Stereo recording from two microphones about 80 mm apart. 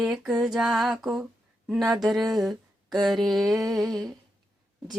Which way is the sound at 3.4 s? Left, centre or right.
Right.